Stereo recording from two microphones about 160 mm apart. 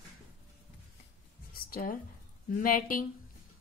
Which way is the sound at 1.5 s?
70° left (ahead or behind).